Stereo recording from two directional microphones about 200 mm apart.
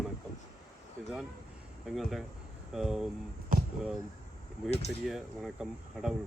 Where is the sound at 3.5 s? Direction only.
45° right (ahead or behind).